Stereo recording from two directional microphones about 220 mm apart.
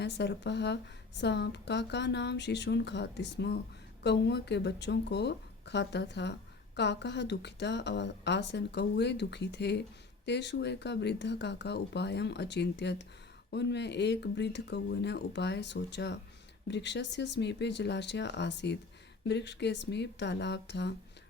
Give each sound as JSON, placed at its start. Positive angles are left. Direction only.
{"t": 0.0, "sound": "speech", "side_deg": 50}